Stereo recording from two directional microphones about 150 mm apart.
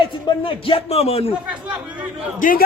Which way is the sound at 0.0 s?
35° left (ahead or behind).